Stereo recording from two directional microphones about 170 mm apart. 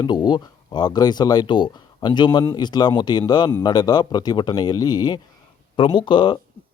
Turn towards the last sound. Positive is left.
turn(degrees=30)  # may be behind; listen again after turning